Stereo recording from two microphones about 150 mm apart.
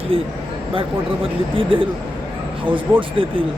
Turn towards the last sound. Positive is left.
turn(degrees=-35)  # may be behind; listen again after turning